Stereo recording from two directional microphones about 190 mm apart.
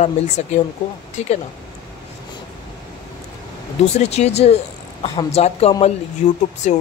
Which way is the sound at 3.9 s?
35° left (ahead or behind).